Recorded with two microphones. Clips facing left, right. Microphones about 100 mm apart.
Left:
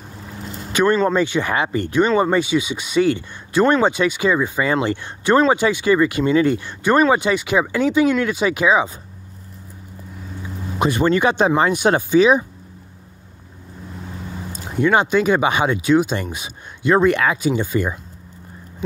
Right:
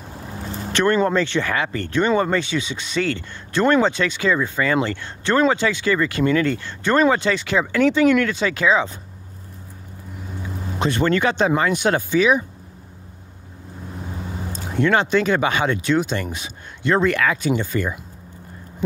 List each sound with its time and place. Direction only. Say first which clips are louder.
1.0 s speech: left 2 dB; 15° left (ahead or behind)
10.8 s speech: left 3 dB; 15° left (ahead or behind)
14.8 s speech: left 2 dB; 10° left (ahead or behind)